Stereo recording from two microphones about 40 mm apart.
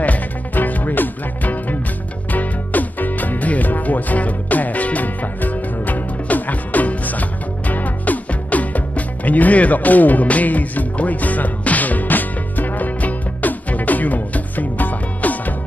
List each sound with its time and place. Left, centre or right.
0.0 s music: left